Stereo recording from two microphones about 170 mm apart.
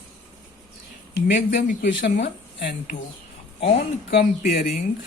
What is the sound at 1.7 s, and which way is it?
Speech, 50° left (ahead or behind).